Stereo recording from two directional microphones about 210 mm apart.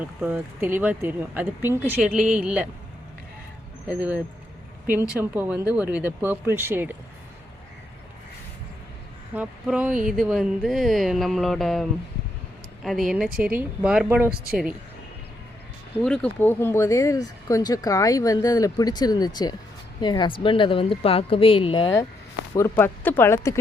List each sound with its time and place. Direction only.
0.0 s speech: 5° right (ahead or behind)
3.8 s speech: 5° right (ahead or behind)
9.3 s speech: 5° right (ahead or behind)
16.0 s speech: 5° left (ahead or behind); by 22.0 s 20° left (ahead or behind)
22.5 s speech: 10° left (ahead or behind)